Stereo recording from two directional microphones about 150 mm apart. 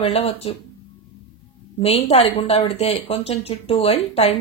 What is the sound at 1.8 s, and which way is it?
Speech, 45° left (ahead or behind).